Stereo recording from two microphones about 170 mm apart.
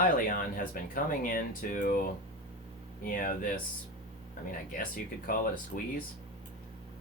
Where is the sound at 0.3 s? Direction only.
55° left (ahead or behind).